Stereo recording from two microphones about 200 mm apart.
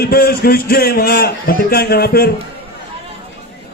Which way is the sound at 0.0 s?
50° left (ahead or behind).